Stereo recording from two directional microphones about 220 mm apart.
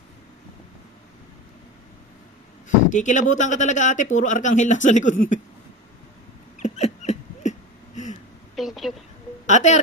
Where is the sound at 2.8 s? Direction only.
35° left (ahead or behind).